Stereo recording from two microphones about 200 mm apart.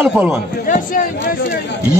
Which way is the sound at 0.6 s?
40° left (ahead or behind).